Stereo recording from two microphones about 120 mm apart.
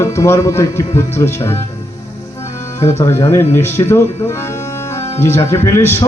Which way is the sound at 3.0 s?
20° left (ahead or behind).